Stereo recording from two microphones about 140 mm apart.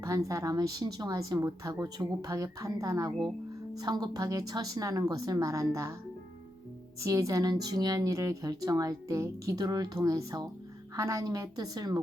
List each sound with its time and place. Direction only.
0.0 s speech: 25° right (ahead or behind)
7.0 s speech: 25° right (ahead or behind)